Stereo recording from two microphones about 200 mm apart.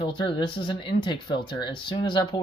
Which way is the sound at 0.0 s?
25° left (ahead or behind).